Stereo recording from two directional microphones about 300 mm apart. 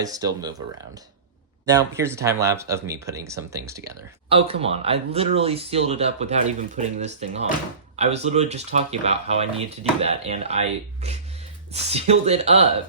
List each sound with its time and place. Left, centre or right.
0.0 s speech: centre
1.6 s speech: centre